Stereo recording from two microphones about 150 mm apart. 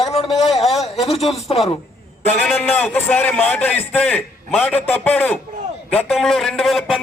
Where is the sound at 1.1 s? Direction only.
40° left (ahead or behind).